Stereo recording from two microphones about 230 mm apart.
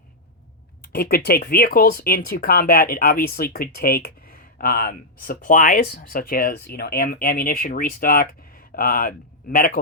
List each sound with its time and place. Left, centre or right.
0.9 s speech: left